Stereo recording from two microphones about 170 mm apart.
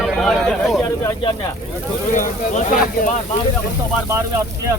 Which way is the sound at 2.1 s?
45° left (ahead or behind).